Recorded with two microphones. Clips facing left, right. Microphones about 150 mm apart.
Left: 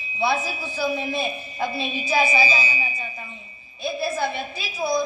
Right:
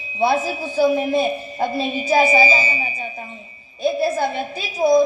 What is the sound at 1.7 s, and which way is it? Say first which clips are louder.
A woman's voice: right 6 dB; 40° right (ahead or behind).